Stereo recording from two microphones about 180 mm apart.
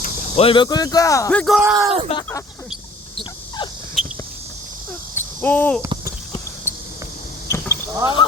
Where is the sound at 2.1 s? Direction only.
35° left (ahead or behind).